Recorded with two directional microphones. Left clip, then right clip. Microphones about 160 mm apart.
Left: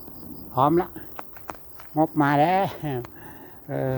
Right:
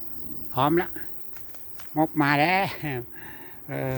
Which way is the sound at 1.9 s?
5° right (ahead or behind).